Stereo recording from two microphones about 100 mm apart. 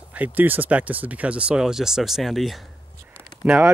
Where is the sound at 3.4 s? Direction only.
15° right (ahead or behind).